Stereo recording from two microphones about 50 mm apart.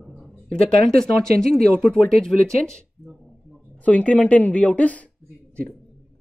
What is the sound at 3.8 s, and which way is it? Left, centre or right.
Speech, left.